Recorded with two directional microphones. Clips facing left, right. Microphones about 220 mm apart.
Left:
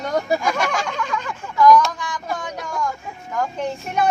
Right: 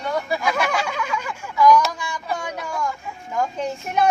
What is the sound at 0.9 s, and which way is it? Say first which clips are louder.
Speech: left 1 dB; 10° right (ahead or behind).